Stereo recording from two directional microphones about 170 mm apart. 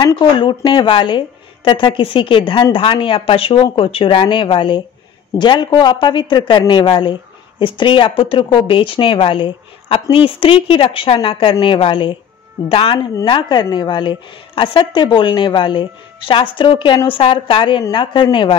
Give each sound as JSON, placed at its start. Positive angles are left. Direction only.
{"t": 0.0, "sound": "speech", "side_deg": 25}